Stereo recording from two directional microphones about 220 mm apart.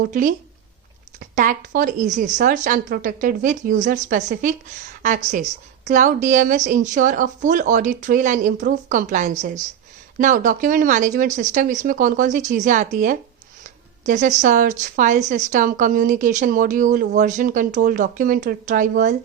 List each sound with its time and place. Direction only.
0.0 s a woman's voice: 35° right (ahead or behind)
1.4 s a woman's voice: 35° right (ahead or behind)